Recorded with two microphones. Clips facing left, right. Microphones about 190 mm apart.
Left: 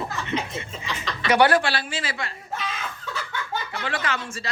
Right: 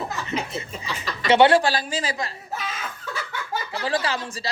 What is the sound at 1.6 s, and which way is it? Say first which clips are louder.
Speech: right 4 dB; 40° right (ahead or behind).